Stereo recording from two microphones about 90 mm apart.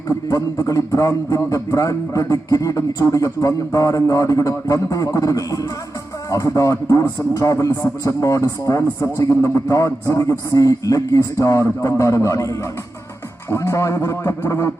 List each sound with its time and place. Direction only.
0.6 s a man's voice: 40° left (ahead or behind)